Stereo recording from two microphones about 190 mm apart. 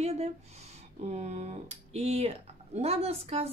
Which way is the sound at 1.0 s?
35° right (ahead or behind).